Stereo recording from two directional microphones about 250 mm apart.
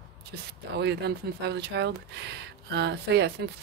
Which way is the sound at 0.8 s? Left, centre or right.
Right.